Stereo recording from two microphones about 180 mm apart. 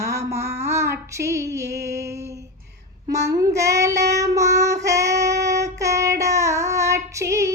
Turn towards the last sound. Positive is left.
turn(degrees=-15)  # may be behind; listen again after turning